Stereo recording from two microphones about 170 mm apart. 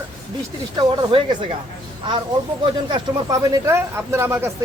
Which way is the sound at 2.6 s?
25° right (ahead or behind).